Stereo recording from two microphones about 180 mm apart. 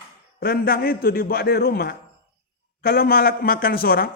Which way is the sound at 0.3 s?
55° left (ahead or behind).